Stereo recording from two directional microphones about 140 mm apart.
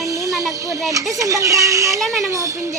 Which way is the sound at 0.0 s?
25° right (ahead or behind).